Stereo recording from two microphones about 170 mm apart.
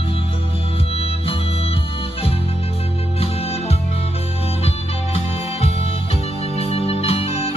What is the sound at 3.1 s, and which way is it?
Music, 35° left (ahead or behind).